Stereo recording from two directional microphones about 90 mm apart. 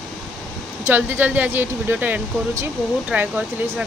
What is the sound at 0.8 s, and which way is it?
Speech, 20° right (ahead or behind).